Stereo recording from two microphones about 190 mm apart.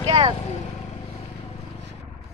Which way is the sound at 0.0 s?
30° right (ahead or behind).